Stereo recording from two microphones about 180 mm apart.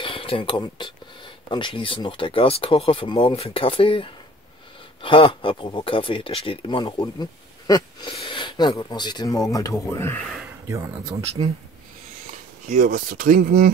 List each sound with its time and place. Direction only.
0.0 s speech: 30° left (ahead or behind); by 10.2 s 10° left (ahead or behind)
10.7 s speech: 15° right (ahead or behind)
12.6 s speech: 50° right (ahead or behind)